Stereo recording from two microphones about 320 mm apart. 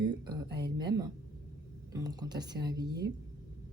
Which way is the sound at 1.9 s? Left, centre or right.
Centre.